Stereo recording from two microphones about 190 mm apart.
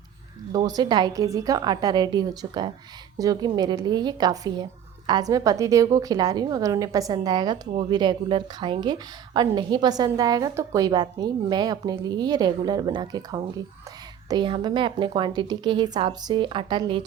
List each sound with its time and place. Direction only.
0.5 s speech: 20° right (ahead or behind)